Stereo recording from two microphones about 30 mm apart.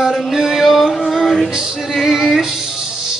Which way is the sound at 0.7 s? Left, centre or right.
Centre.